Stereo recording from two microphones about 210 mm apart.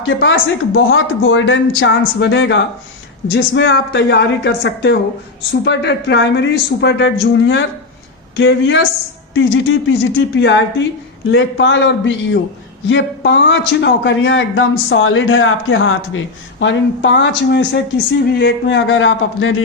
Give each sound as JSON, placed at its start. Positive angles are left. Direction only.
{"t": 0.0, "sound": "a man's voice", "side_deg": 65}